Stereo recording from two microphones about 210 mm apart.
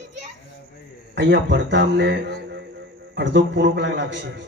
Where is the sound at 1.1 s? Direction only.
55° right (ahead or behind).